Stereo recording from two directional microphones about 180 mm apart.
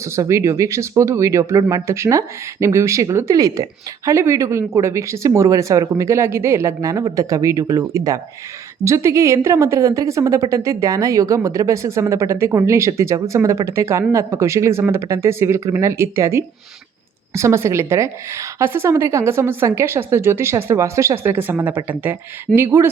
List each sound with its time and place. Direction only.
0.0 s speech: 15° right (ahead or behind)